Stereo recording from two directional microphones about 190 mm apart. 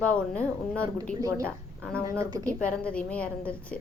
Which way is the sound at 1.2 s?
15° right (ahead or behind).